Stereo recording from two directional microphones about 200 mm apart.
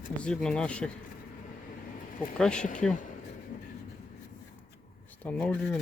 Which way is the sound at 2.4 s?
5° left (ahead or behind).